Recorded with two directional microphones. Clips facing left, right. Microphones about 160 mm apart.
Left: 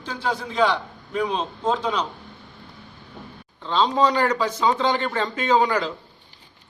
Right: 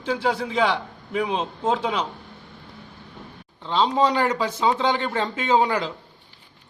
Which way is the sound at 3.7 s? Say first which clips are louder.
Even; 20° right (ahead or behind).